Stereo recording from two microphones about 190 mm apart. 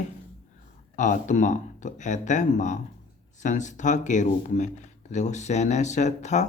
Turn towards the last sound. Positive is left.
turn(degrees=40)  # may be behind; listen again after turning